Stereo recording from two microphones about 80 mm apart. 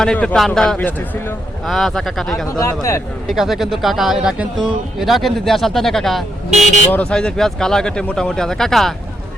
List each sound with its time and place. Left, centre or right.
0.0 s speech: centre
2.6 s a man's voice: left
3.2 s speech: centre